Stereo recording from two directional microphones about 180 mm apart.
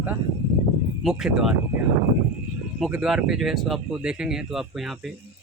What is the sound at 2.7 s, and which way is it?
Speech, 5° right (ahead or behind).